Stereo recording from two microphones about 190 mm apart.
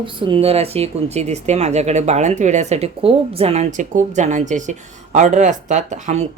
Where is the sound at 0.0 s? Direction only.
25° right (ahead or behind).